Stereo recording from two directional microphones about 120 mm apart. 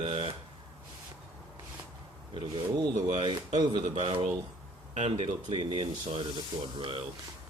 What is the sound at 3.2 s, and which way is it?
Speech, 40° right (ahead or behind).